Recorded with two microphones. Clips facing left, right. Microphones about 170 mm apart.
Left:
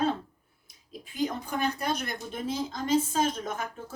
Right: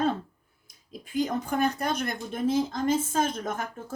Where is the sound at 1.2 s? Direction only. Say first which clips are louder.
Right 2 dB; 50° right (ahead or behind).